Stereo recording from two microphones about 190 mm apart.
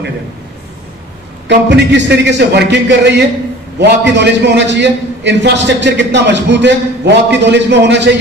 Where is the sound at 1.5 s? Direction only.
65° right (ahead or behind).